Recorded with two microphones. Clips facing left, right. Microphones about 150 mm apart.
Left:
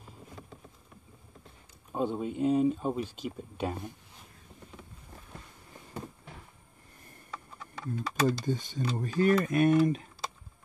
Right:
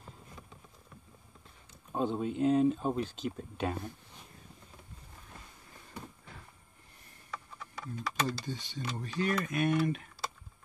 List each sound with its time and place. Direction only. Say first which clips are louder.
1.9 s speech: left 1 dB; 5° left (ahead or behind)
8.2 s speech: left 8 dB; 45° left (ahead or behind)